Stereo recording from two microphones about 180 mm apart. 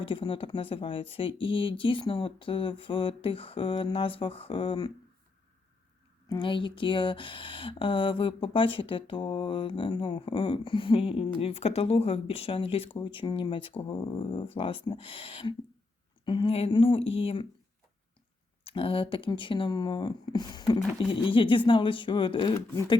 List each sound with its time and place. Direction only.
0.0 s speech: 30° left (ahead or behind)
6.2 s speech: 25° left (ahead or behind)
18.6 s speech: 30° left (ahead or behind)
22.7 s speech: 15° left (ahead or behind)